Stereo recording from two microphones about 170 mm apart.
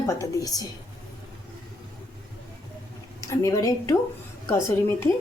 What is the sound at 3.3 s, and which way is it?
Speech, 20° left (ahead or behind).